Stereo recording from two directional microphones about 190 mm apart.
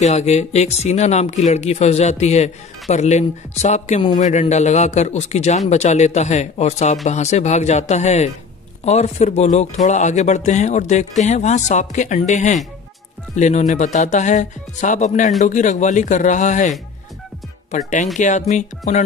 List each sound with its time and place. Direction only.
0.0 s speech: 35° left (ahead or behind)